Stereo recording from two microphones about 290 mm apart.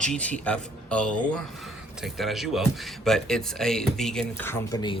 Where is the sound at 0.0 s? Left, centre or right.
Centre.